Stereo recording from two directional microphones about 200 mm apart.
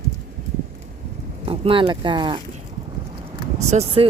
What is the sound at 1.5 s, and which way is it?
Speech, 25° right (ahead or behind).